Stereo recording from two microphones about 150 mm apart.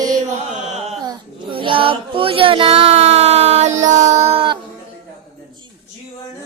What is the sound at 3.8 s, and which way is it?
Music, 55° right (ahead or behind).